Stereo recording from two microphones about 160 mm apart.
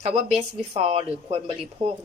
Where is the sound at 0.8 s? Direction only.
40° right (ahead or behind).